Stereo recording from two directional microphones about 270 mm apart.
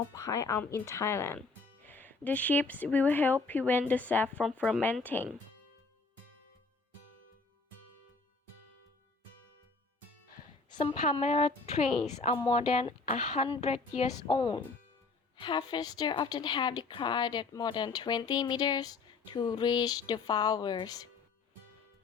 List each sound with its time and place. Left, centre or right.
0.1 s a woman's voice: centre
10.8 s speech: left
11.9 s a woman's voice: centre
12.2 s a woman's voice: centre